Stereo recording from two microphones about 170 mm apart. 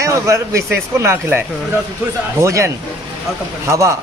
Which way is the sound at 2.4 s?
15° right (ahead or behind).